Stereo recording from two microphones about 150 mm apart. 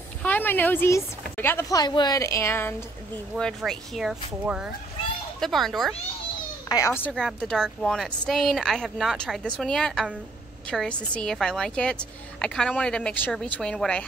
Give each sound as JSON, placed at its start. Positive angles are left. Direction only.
{"t": 0.2, "sound": "speech", "side_deg": 10}
{"t": 3.3, "sound": "a woman's voice", "side_deg": 5}
{"t": 6.7, "sound": "a child's voice", "side_deg": 20}
{"t": 7.2, "sound": "a woman's voice", "side_deg": 5}